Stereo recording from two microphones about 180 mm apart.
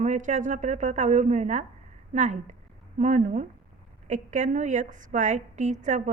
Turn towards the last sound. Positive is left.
turn(degrees=-45)  # may be behind; listen again after turning